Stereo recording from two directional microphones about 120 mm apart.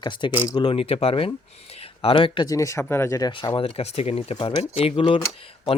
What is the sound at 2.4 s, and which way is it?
Speech, 30° left (ahead or behind).